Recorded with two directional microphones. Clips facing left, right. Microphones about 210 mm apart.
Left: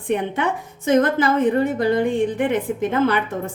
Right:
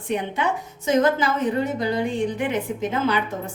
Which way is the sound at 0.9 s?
55° left (ahead or behind).